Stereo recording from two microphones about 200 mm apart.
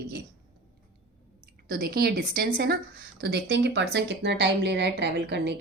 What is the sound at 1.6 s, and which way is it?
A woman's voice, 45° right (ahead or behind).